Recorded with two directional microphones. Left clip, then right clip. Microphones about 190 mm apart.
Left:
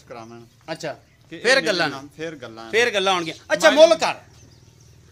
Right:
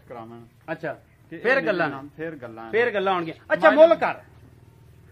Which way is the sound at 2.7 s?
35° left (ahead or behind).